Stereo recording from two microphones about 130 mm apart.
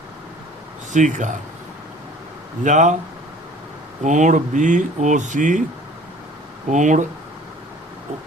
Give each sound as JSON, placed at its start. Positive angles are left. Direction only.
{"t": 0.9, "sound": "speech", "side_deg": -70}
{"t": 2.6, "sound": "speech", "side_deg": -70}
{"t": 4.0, "sound": "speech", "side_deg": -70}
{"t": 6.7, "sound": "speech", "side_deg": -70}